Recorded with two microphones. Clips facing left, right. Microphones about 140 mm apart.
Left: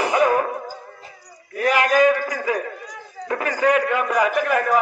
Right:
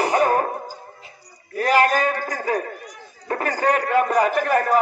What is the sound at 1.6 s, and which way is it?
A man's voice, 35° right (ahead or behind).